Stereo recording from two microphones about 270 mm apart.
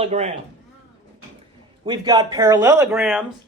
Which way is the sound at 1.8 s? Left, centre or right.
Centre.